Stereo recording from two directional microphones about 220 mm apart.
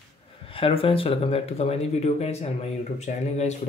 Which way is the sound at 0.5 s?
25° left (ahead or behind).